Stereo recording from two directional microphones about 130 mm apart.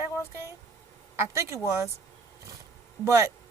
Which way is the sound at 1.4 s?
25° right (ahead or behind).